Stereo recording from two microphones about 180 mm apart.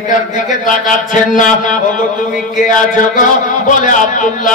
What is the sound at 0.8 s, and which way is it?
Speech, 45° left (ahead or behind).